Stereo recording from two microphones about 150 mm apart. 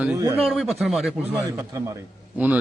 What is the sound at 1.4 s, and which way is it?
Speech, 20° right (ahead or behind).